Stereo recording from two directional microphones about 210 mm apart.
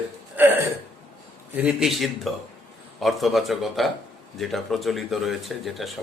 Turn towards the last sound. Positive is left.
turn(degrees=0)  # may be behind; listen again after turning